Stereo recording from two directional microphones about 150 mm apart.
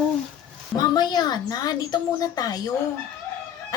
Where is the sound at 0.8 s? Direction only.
30° left (ahead or behind).